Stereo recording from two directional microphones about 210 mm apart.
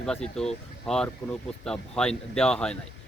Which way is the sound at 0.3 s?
5° left (ahead or behind).